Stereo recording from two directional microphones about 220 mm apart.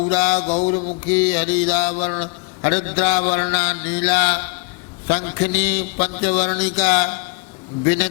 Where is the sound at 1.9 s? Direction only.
35° left (ahead or behind).